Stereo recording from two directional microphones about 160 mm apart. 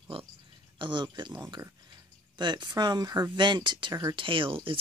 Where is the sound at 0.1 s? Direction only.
35° right (ahead or behind).